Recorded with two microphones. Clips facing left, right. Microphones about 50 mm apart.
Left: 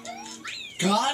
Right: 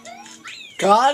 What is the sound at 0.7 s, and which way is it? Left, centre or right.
Speech, right.